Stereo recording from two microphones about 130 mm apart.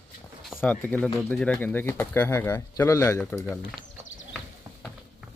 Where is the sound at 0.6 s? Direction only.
10° left (ahead or behind).